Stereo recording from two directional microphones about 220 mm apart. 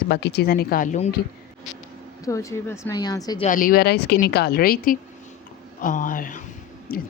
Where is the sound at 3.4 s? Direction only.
40° left (ahead or behind).